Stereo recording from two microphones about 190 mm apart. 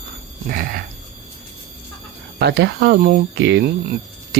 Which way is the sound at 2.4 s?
60° right (ahead or behind).